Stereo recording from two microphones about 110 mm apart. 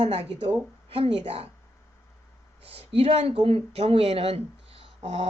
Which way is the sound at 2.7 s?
60° right (ahead or behind).